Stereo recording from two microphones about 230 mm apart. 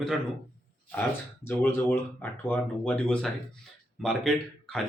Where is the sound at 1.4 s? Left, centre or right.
Centre.